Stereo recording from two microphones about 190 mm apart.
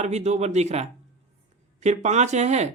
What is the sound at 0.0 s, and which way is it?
Speech, 35° right (ahead or behind).